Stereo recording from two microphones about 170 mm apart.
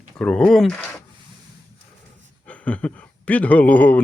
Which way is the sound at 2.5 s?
10° left (ahead or behind).